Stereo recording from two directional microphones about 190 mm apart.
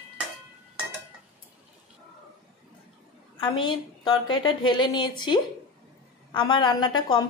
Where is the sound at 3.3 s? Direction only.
25° left (ahead or behind).